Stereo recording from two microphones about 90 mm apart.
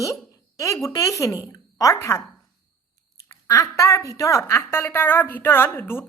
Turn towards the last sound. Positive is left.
turn(degrees=25)  # may be behind; listen again after turning